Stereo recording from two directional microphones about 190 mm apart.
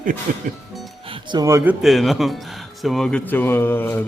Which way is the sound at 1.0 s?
25° right (ahead or behind).